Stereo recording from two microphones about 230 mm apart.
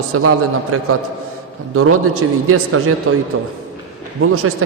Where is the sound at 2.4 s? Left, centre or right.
Right.